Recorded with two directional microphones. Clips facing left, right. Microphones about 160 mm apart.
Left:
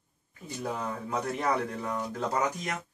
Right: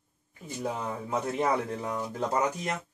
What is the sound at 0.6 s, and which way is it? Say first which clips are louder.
Speech: right 1 dB; 20° right (ahead or behind).